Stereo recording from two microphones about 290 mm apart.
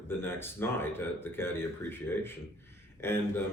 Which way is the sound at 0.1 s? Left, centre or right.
Centre.